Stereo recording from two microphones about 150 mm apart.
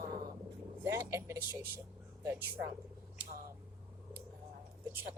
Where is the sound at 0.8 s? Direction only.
15° right (ahead or behind).